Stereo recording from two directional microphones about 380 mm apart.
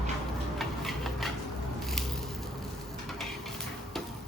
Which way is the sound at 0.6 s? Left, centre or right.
Centre.